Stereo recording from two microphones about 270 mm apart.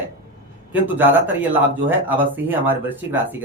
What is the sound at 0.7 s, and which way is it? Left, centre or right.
A man's voice, centre.